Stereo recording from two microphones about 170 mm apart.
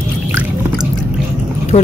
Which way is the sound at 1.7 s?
40° left (ahead or behind).